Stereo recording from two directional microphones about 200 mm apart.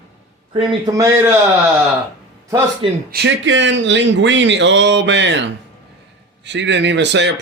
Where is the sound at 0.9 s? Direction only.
15° right (ahead or behind).